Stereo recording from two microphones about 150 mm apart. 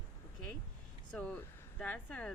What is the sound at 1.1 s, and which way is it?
Speech, 10° left (ahead or behind).